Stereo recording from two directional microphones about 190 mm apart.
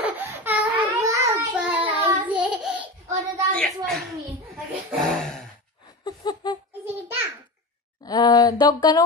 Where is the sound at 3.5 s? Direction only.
5° left (ahead or behind).